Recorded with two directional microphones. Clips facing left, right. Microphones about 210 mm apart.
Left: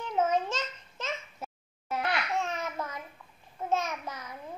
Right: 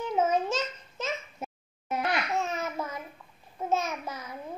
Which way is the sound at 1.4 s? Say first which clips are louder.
Right 3 dB; 20° right (ahead or behind).